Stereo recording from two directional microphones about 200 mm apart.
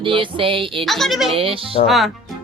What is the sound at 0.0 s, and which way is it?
Speech, 25° right (ahead or behind).